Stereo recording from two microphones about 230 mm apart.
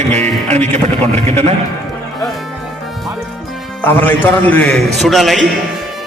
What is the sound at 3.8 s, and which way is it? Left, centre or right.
A man's voice, centre.